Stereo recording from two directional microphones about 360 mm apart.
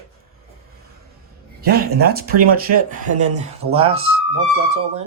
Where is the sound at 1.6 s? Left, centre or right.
Right.